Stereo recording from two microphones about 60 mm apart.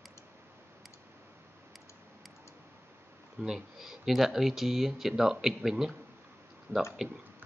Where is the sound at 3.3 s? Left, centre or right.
Centre.